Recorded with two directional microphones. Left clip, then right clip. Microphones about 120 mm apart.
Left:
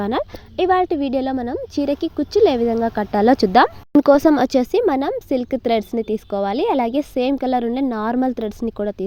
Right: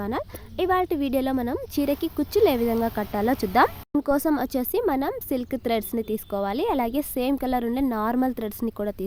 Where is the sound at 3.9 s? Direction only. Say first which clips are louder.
Left 11 dB; 85° left.